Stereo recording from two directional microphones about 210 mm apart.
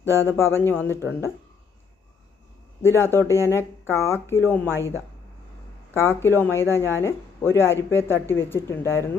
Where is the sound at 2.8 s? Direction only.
10° left (ahead or behind).